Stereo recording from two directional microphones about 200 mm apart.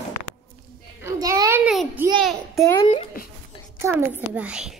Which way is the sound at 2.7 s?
30° left (ahead or behind).